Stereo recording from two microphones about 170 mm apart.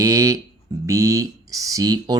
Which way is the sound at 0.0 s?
20° right (ahead or behind).